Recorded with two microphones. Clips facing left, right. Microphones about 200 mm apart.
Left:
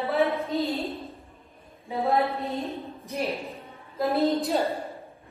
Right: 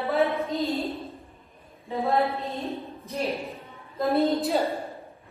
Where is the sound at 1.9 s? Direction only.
15° left (ahead or behind).